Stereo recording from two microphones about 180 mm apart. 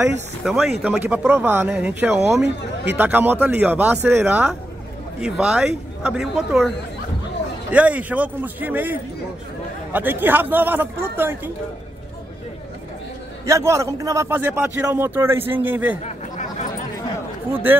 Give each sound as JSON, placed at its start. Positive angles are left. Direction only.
{"t": 0.4, "sound": "a man's voice", "side_deg": 0}
{"t": 2.4, "sound": "speech", "side_deg": -70}
{"t": 3.0, "sound": "a man's voice", "side_deg": -10}
{"t": 7.7, "sound": "a man's voice", "side_deg": -10}
{"t": 13.5, "sound": "a man's voice", "side_deg": -15}
{"t": 16.0, "sound": "chatter", "side_deg": 40}
{"t": 17.5, "sound": "speech", "side_deg": -10}